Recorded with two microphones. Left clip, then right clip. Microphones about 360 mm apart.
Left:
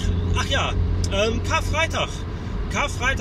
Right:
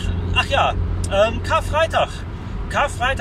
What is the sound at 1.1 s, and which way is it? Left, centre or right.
Speech, right.